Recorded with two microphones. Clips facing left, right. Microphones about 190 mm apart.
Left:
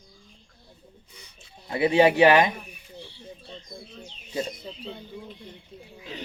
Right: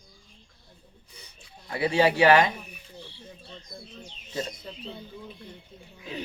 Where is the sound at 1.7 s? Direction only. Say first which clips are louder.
Left 4 dB; 20° left (ahead or behind).